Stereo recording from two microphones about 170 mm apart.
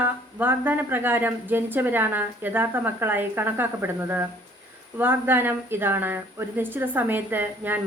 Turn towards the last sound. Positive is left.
turn(degrees=-10)  # may be behind; listen again after turning